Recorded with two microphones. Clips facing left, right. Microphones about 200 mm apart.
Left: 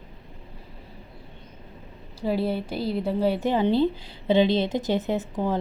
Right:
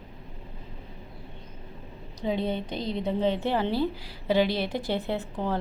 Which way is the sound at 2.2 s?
5° left (ahead or behind).